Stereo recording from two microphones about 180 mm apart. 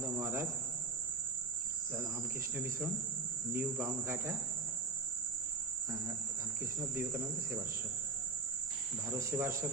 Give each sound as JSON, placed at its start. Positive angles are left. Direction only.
{"t": 0.0, "sound": "cricket", "side_deg": -15}
{"t": 3.5, "sound": "cricket", "side_deg": -15}
{"t": 6.7, "sound": "cricket", "side_deg": -15}
{"t": 9.0, "sound": "cricket", "side_deg": -15}